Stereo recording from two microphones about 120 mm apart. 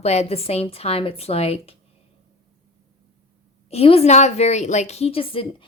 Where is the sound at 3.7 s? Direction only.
55° left (ahead or behind).